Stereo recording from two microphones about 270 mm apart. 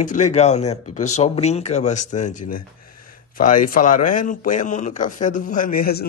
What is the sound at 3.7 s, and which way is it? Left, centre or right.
Speech, left.